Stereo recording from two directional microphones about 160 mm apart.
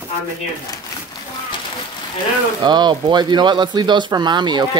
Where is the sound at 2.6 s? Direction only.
25° right (ahead or behind).